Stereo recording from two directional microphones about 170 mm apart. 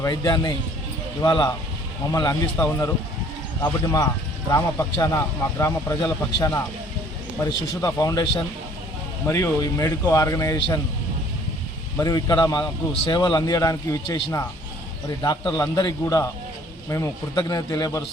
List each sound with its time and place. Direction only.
0.0 s speech: 20° left (ahead or behind)
11.9 s speech: 20° left (ahead or behind)